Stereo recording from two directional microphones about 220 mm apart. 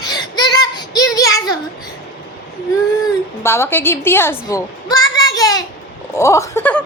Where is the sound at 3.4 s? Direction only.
10° left (ahead or behind).